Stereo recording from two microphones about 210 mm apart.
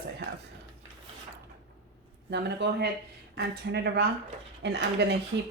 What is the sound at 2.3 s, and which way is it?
Speech, 55° right (ahead or behind).